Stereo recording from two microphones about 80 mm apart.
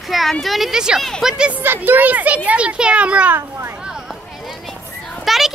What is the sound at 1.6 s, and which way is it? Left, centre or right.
A child's voice, right.